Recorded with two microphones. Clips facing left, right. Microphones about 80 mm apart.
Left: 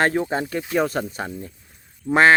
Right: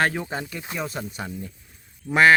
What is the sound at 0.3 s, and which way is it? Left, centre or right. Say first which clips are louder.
Speech: left 7 dB; left.